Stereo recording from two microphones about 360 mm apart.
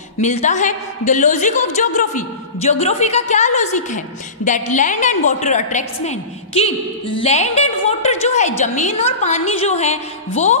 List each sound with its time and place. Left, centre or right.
0.2 s a woman's voice: centre